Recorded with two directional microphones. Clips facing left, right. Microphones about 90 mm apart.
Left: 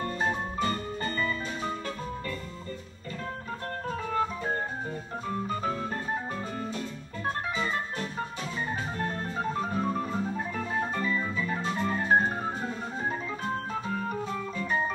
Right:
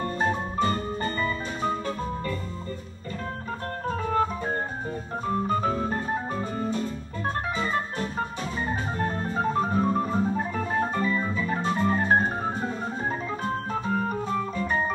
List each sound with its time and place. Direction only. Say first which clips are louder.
0.0 s music: right 3 dB; 40° right (ahead or behind)
3.9 s organ: right 5 dB; 45° right (ahead or behind)
9.3 s organ: right 8 dB; 40° right (ahead or behind)
13.7 s organ: right 4 dB; 45° right (ahead or behind)